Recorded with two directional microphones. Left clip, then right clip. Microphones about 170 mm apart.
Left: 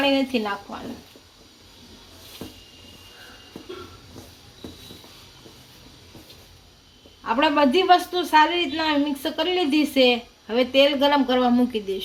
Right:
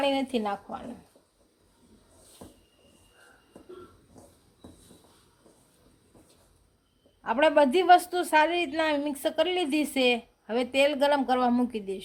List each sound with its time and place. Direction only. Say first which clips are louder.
0.0 s a woman's voice: left 5 dB; 65° right (ahead or behind)
2.4 s a sound: left 9 dB; 15° right (ahead or behind)
7.3 s a woman's voice: left 2 dB; 60° right (ahead or behind)